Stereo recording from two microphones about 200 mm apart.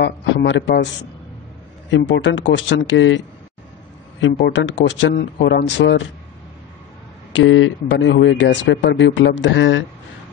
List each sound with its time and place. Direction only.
0.0 s a man's voice: 60° left (ahead or behind)
1.9 s speech: 65° left (ahead or behind)
4.3 s speech: 60° left (ahead or behind)
7.3 s speech: 75° left (ahead or behind)